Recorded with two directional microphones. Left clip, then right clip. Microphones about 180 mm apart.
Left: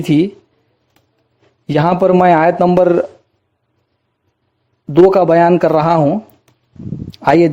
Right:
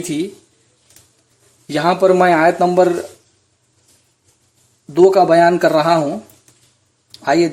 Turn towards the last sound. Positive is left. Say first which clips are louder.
# left 4 dB
turn(degrees=35)  # may be behind; listen again after turning